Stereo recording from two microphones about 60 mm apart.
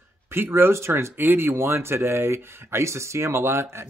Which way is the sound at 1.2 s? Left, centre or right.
Right.